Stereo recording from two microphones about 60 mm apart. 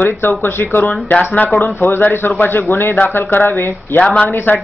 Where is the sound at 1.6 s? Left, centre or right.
Left.